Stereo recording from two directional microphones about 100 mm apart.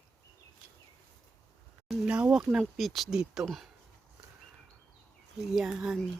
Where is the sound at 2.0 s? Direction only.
10° right (ahead or behind).